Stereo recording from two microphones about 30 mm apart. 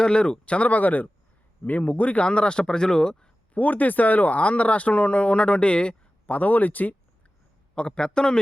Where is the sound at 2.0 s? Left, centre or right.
Left.